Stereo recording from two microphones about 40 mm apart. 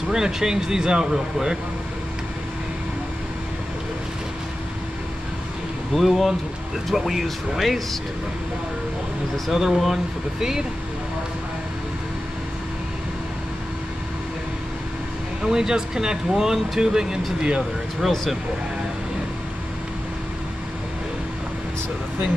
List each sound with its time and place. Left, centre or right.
0.1 s speech: centre
5.9 s speech: centre
9.5 s speech: centre
15.4 s speech: centre
18.0 s speech: centre